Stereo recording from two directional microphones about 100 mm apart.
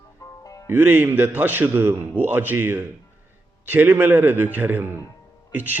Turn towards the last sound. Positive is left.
turn(degrees=-15)  # may be behind; listen again after turning